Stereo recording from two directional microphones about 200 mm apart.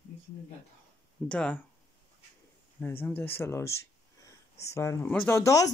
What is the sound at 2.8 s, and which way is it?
Speech, 10° left (ahead or behind).